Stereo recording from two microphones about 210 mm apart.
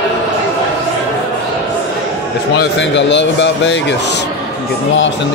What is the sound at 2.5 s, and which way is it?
A man's voice, 55° left (ahead or behind).